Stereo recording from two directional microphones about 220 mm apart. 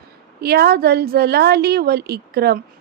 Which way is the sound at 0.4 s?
45° right (ahead or behind).